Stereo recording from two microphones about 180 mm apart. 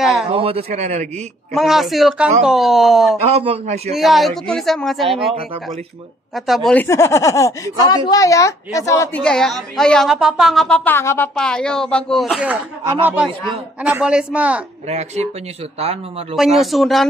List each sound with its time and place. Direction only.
0.0 s a woman's voice: centre (ahead or behind)
0.3 s a man's voice: 30° right (ahead or behind)
1.5 s a woman's voice: centre (ahead or behind)
3.3 s a man's voice: 35° right (ahead or behind)
3.9 s a woman's voice: centre (ahead or behind)
6.3 s a woman's voice: centre (ahead or behind); by 9.2 s 15° left (ahead or behind)
9.2 s a woman's voice: 5° left (ahead or behind)
14.9 s a man's voice: 40° right (ahead or behind)
16.3 s a woman's voice: centre (ahead or behind)